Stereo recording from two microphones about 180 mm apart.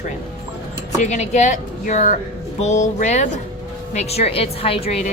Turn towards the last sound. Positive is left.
turn(degrees=35)  # may be behind; listen again after turning